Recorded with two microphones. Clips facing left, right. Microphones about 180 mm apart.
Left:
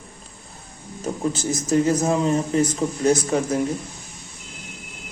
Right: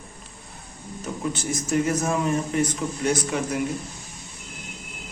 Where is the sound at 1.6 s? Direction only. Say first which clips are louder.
Left 4 dB; 35° left (ahead or behind).